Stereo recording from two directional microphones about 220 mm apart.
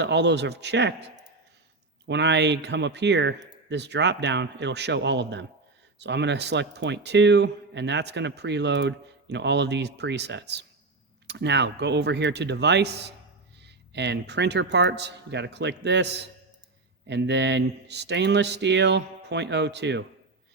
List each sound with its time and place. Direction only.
0.0 s speech: 50° right (ahead or behind)
2.0 s speech: 50° right (ahead or behind)
17.1 s speech: 50° right (ahead or behind)